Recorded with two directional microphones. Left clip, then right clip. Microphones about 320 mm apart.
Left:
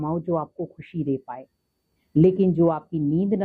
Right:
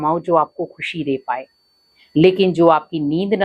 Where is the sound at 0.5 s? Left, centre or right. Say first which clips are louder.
Right 7 dB; right.